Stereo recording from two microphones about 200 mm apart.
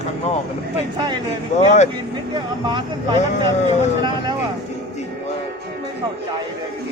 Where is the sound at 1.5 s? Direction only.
35° left (ahead or behind).